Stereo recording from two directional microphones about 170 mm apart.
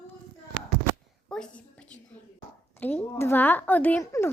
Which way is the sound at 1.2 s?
5° left (ahead or behind).